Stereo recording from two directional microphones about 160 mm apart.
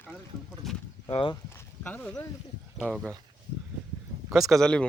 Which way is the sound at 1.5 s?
10° left (ahead or behind).